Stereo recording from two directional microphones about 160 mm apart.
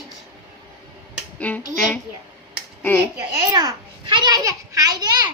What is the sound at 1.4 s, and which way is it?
Speech, 10° left (ahead or behind).